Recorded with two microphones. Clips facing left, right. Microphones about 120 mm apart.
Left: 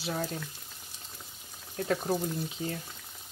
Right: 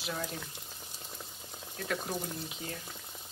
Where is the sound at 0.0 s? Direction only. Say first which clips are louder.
Left 4 dB; 35° left (ahead or behind).